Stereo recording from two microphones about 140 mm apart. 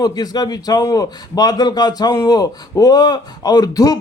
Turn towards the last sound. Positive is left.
turn(degrees=25)  # may be behind; listen again after turning